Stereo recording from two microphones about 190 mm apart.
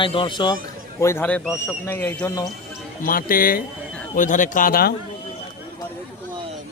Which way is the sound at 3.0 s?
50° left (ahead or behind).